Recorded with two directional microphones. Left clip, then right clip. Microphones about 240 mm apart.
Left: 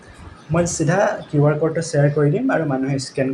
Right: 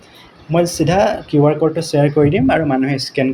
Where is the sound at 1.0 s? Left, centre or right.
Right.